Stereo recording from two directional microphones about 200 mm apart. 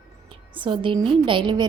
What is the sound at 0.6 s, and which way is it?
A woman's voice, 25° right (ahead or behind).